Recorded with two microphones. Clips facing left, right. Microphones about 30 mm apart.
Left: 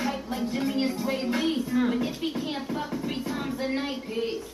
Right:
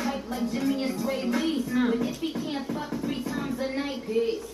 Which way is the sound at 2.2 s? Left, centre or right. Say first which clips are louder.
Left 1 dB; left.